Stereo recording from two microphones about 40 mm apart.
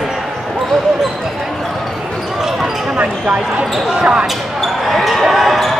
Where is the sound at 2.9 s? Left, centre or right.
Right.